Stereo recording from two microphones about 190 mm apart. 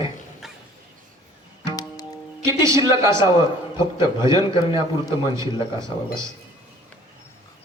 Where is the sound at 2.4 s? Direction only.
15° right (ahead or behind).